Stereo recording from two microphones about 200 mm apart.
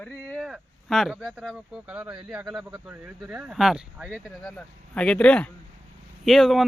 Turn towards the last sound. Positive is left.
turn(degrees=0)  # may be behind; listen again after turning